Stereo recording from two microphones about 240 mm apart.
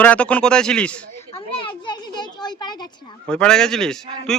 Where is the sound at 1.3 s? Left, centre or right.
Left.